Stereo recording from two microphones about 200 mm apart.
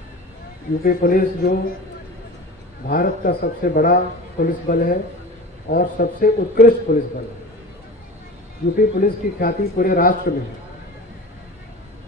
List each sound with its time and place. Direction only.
0.8 s a man's voice: 45° left (ahead or behind)
2.9 s a man's voice: 50° left (ahead or behind)
8.7 s a man's voice: 45° left (ahead or behind)